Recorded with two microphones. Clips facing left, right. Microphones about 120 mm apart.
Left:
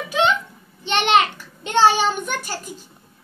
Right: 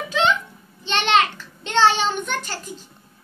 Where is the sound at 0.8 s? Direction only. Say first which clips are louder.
Left 2 dB; 15° left (ahead or behind).